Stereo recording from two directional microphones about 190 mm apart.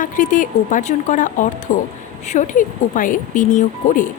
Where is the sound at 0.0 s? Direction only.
45° left (ahead or behind).